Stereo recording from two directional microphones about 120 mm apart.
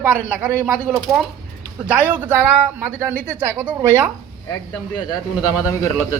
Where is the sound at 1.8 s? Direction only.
10° right (ahead or behind).